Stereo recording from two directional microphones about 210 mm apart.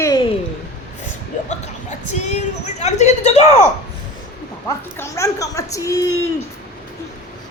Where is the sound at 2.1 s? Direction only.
35° left (ahead or behind).